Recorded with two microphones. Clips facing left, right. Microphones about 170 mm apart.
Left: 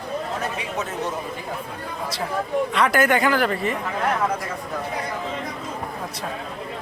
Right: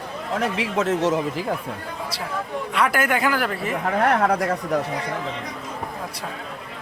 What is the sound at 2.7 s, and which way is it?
Speech, 10° right (ahead or behind).